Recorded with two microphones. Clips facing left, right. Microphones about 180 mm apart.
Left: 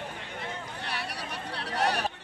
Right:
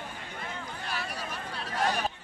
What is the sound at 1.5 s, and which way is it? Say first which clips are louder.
Chatter: left 1 dB; 70° left (ahead or behind).